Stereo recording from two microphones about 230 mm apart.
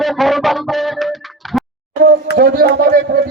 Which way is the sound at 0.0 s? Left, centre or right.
Centre.